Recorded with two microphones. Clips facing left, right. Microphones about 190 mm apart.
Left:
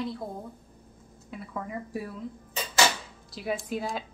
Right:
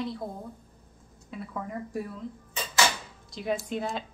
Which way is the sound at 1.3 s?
Centre (ahead or behind).